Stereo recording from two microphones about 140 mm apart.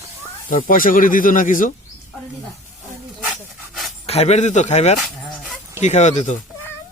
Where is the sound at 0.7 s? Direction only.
80° left.